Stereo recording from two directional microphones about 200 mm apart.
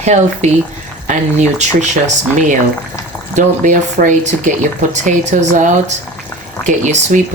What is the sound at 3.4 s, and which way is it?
Speech, 40° right (ahead or behind).